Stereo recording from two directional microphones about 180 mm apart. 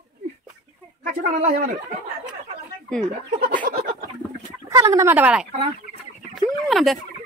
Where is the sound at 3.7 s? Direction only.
50° right (ahead or behind).